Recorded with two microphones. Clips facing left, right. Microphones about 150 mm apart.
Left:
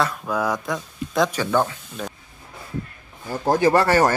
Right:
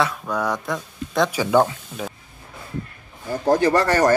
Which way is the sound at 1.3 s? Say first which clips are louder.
Right 4 dB; 15° right (ahead or behind).